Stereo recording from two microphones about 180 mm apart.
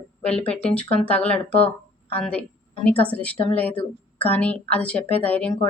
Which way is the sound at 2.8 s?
5° left (ahead or behind).